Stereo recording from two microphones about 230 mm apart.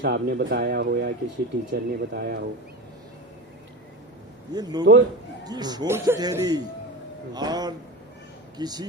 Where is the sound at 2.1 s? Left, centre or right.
Right.